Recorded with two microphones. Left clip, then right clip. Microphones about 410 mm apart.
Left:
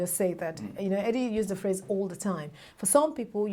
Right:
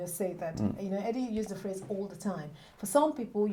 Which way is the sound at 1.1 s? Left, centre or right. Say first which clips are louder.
Left 6 dB; left.